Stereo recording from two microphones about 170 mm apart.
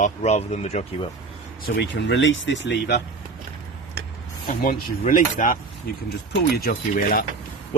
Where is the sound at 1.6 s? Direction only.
70° left (ahead or behind); by 3.0 s 90° left.